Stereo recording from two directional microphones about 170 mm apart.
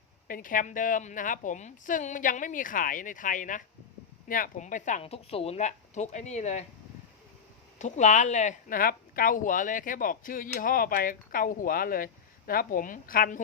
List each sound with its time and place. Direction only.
0.3 s speech: 55° left (ahead or behind)
7.8 s speech: 45° left (ahead or behind)